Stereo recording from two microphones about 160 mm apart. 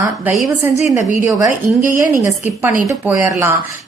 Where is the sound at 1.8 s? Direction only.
55° right (ahead or behind).